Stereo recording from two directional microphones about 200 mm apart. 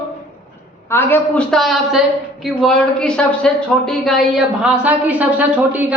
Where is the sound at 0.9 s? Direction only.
10° left (ahead or behind); by 5.8 s 10° right (ahead or behind).